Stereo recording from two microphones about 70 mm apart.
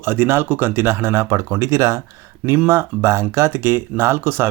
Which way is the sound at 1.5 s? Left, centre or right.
Right.